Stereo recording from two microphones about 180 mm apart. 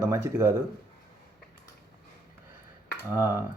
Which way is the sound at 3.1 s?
10° right (ahead or behind).